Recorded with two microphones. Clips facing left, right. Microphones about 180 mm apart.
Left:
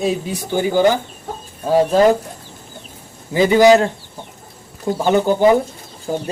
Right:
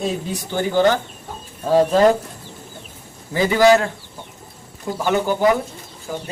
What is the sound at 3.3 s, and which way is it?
Speech, 20° left (ahead or behind).